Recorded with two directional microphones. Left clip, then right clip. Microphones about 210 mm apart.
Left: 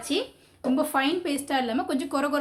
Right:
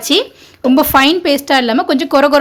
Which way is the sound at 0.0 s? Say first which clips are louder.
Right 15 dB; 50° right (ahead or behind).